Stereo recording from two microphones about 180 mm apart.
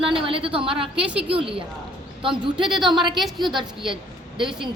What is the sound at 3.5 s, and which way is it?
A woman's voice, 25° right (ahead or behind).